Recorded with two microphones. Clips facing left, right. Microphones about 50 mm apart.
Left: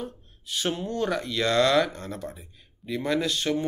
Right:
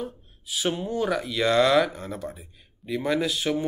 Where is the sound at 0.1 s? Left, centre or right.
Centre.